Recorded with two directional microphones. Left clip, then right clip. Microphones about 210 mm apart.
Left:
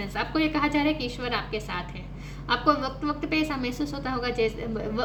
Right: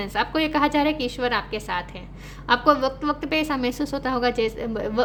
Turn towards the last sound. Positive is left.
turn(degrees=-55)  # may be behind; listen again after turning